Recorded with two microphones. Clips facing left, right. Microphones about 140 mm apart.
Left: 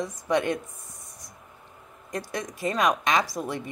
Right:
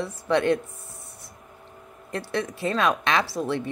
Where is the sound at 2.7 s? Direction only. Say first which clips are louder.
Even; 15° left (ahead or behind).